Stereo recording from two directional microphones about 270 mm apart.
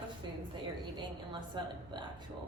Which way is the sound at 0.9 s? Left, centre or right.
Centre.